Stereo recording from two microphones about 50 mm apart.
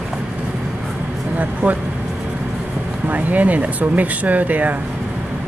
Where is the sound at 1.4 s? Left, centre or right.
Right.